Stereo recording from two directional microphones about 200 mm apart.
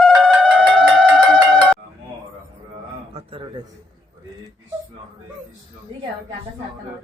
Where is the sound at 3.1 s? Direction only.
30° right (ahead or behind).